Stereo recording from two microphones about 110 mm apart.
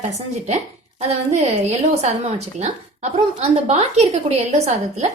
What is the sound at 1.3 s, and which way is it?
A woman's voice, 90° right.